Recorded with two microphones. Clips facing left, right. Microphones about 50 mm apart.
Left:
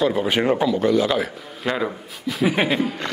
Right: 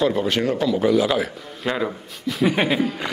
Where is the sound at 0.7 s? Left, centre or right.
Centre.